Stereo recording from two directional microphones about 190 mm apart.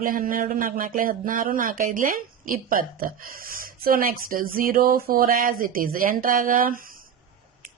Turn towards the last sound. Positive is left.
turn(degrees=-50)  # may be behind; listen again after turning